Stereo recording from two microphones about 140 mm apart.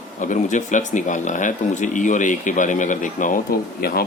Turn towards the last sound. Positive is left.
turn(degrees=90)